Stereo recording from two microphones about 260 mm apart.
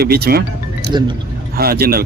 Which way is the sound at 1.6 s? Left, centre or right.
Right.